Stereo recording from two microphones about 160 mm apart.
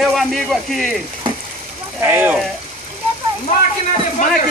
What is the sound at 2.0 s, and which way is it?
Speech, 15° right (ahead or behind).